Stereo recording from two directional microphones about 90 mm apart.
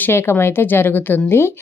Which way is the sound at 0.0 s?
30° left (ahead or behind).